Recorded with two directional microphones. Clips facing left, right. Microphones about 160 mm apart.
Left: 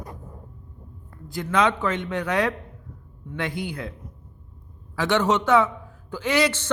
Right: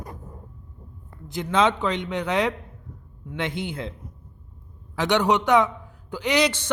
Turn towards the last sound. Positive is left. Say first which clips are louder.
# even
turn(degrees=-15)  # may be behind; listen again after turning